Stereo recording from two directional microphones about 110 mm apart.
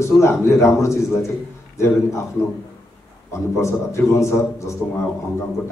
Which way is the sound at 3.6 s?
25° left (ahead or behind).